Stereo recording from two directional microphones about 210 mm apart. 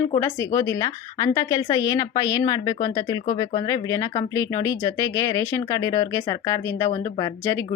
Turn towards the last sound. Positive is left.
turn(degrees=15)  # may be behind; listen again after turning